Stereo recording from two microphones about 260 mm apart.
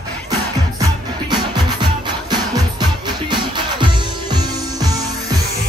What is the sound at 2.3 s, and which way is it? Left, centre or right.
Music, centre.